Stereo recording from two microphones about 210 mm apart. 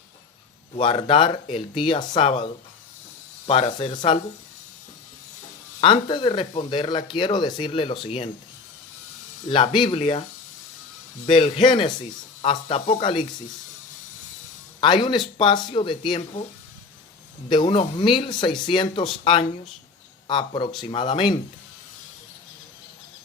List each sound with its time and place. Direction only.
0.8 s speech: 25° left (ahead or behind)
5.8 s speech: 25° left (ahead or behind)
9.5 s speech: 25° left (ahead or behind)
11.3 s speech: 25° left (ahead or behind)
14.8 s speech: 25° left (ahead or behind)
17.5 s speech: 25° left (ahead or behind)